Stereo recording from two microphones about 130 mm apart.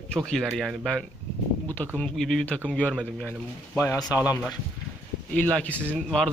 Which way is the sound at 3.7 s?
20° left (ahead or behind).